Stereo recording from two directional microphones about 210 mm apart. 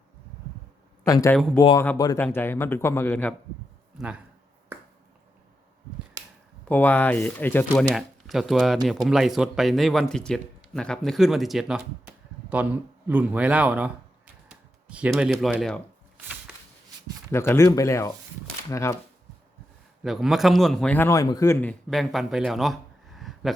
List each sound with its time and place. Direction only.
1.0 s speech: 15° left (ahead or behind)
6.7 s speech: 5° left (ahead or behind)
14.4 s a sound: 5° right (ahead or behind)
17.3 s speech: 10° left (ahead or behind)
20.0 s speech: centre (ahead or behind)